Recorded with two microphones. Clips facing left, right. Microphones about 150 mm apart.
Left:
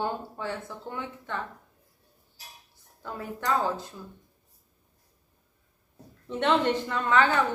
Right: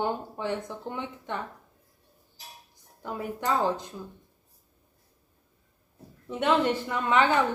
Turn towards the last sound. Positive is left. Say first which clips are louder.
# even
turn(degrees=-15)  # may be behind; listen again after turning